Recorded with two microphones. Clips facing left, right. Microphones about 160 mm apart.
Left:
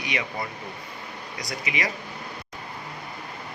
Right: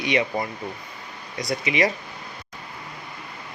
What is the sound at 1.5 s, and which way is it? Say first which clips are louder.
Speech: right 8 dB; 25° right (ahead or behind).